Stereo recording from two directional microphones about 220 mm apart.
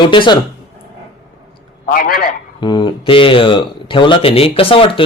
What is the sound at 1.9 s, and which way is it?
Speech, 40° left (ahead or behind).